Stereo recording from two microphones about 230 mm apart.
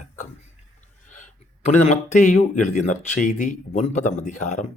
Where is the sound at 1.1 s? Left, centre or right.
Left.